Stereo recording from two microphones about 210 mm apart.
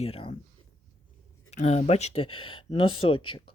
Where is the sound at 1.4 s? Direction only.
30° left (ahead or behind).